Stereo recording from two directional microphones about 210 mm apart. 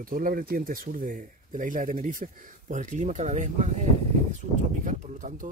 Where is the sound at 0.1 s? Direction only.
40° right (ahead or behind).